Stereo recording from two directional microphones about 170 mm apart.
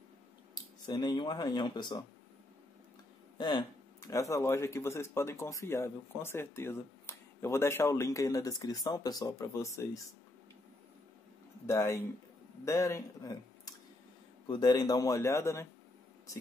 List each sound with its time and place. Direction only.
0.8 s speech: 25° left (ahead or behind)
3.3 s speech: 25° left (ahead or behind)
11.6 s speech: 15° left (ahead or behind)